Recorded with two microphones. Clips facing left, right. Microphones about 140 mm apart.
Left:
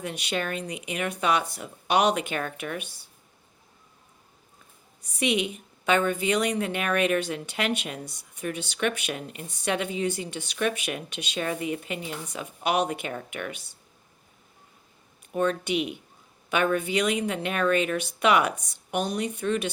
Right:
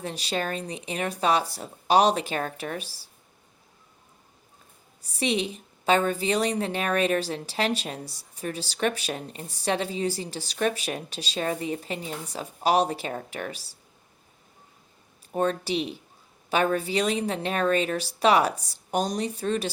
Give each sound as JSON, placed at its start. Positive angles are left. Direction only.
{"t": 0.0, "sound": "a woman's voice", "side_deg": -30}
{"t": 5.0, "sound": "a woman's voice", "side_deg": -30}
{"t": 15.3, "sound": "a woman's voice", "side_deg": -35}